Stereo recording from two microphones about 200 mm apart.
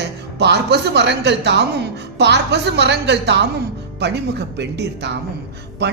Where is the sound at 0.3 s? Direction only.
55° right (ahead or behind).